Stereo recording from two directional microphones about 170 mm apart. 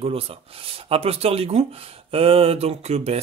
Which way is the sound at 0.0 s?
35° right (ahead or behind).